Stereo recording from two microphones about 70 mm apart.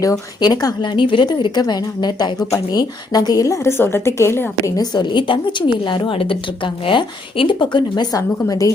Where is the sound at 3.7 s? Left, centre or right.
Left.